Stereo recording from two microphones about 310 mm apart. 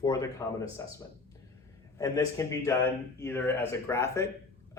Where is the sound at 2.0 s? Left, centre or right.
Centre.